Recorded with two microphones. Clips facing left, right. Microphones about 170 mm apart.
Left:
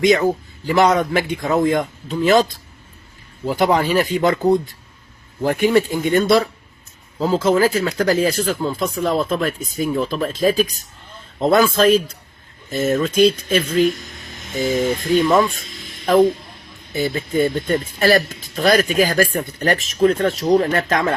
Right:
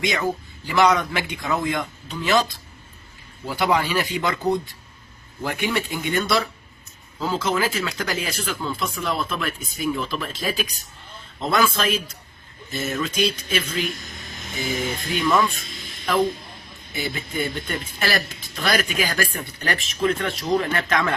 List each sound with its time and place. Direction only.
0.0 s a man's voice: 40° left (ahead or behind)
15.2 s speech: 35° left (ahead or behind)
16.9 s speech: 40° left (ahead or behind)